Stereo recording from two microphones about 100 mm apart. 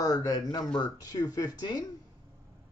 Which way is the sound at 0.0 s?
40° left (ahead or behind).